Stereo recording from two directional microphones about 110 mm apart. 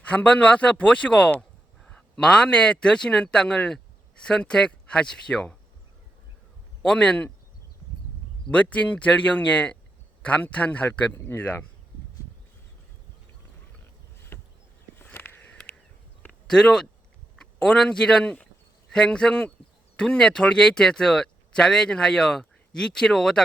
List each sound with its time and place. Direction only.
0.0 s speech: 10° left (ahead or behind)
6.8 s speech: 10° left (ahead or behind)
8.4 s speech: 10° left (ahead or behind)
14.3 s a sound: 25° left (ahead or behind); by 16.9 s 5° left (ahead or behind)
17.3 s speech: 5° left (ahead or behind)